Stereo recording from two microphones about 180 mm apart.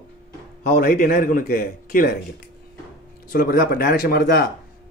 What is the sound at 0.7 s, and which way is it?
A man's voice, 55° left (ahead or behind).